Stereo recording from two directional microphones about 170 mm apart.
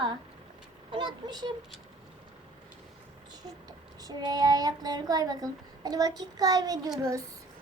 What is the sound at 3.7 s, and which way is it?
Child singing, 25° right (ahead or behind).